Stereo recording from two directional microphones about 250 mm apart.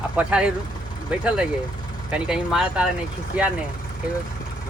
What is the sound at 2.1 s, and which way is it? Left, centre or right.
Speech, centre.